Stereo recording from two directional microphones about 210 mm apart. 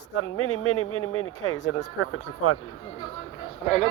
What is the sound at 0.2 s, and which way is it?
Speech, 90° left.